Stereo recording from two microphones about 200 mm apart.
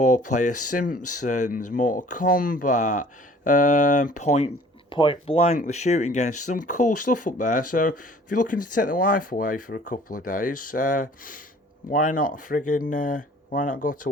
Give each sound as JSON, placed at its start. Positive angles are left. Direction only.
{"t": 0.0, "sound": "speech", "side_deg": 40}